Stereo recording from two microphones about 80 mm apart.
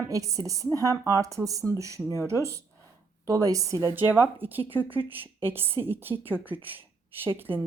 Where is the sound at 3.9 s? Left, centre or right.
Right.